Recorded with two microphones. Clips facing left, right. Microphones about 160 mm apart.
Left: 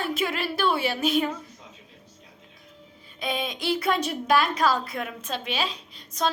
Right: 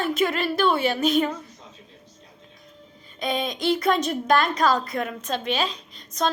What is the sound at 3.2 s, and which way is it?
A woman's voice, 5° left (ahead or behind).